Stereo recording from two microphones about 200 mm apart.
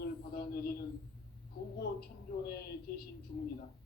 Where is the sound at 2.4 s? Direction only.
50° left (ahead or behind).